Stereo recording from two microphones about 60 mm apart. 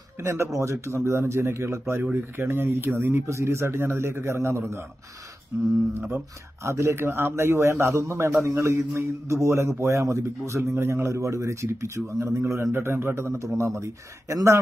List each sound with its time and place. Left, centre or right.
0.2 s speech: right
5.5 s speech: right
6.6 s speech: right
7.0 s a man's voice: right
12.7 s speech: right